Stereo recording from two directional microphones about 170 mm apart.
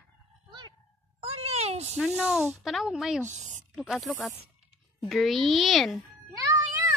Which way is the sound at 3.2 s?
45° right (ahead or behind).